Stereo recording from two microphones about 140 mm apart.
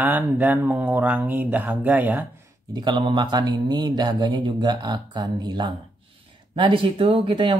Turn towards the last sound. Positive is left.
turn(degrees=-35)  # may be behind; listen again after turning